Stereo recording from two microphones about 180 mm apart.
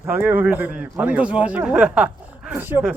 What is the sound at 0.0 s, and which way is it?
A man's voice, 10° right (ahead or behind).